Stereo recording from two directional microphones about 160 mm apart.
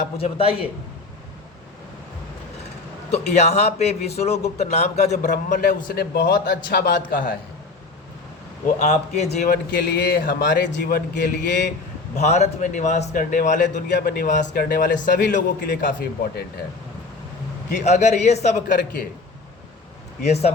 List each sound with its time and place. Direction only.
0.2 s speech: 35° left (ahead or behind)
3.1 s a man's voice: 45° left (ahead or behind); by 7.3 s 60° left (ahead or behind)
8.8 s a man's voice: 45° left (ahead or behind)
9.4 s a man's voice: 60° left (ahead or behind); by 11.2 s 80° left
12.1 s a man's voice: 45° left (ahead or behind)
13.9 s a man's voice: 75° left (ahead or behind); by 15.4 s 55° left (ahead or behind)
15.4 s a man's voice: 75° left (ahead or behind)
17.7 s a man's voice: 45° left (ahead or behind)
20.2 s speech: 40° left (ahead or behind)